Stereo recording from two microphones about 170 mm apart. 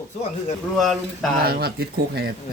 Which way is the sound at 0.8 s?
Centre (ahead or behind).